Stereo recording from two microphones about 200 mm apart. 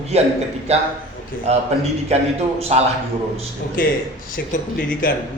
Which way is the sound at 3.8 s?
45° left (ahead or behind).